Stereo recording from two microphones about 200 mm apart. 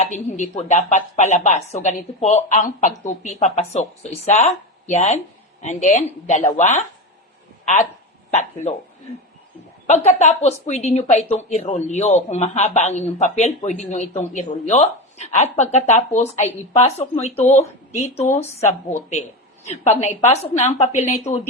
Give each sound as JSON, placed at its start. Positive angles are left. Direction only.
{"t": 0.3, "sound": "a woman's voice", "side_deg": 35}
{"t": 8.3, "sound": "speech", "side_deg": 35}
{"t": 9.9, "sound": "a woman's voice", "side_deg": 35}